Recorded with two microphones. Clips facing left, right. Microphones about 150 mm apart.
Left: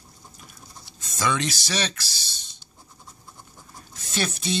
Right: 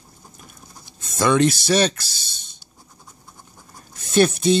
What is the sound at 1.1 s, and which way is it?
Speech, 55° right (ahead or behind).